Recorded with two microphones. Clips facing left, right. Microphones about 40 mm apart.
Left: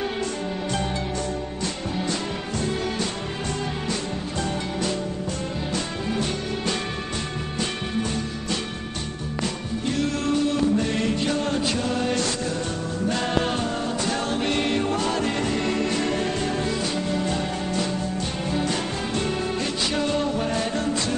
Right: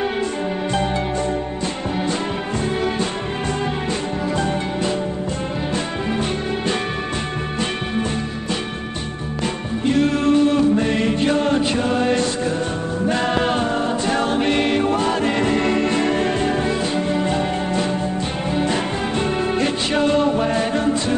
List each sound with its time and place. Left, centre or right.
9.8 s music: right